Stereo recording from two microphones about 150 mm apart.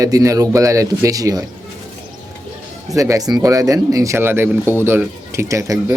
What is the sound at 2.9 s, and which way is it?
Speech, 20° right (ahead or behind).